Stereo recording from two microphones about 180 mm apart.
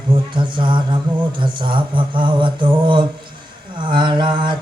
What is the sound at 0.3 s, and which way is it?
Speech, 25° right (ahead or behind).